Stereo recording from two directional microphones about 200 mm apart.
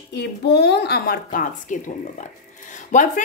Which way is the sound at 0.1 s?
55° left (ahead or behind).